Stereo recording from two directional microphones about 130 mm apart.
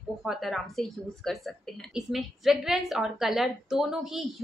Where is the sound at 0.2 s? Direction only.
Centre (ahead or behind).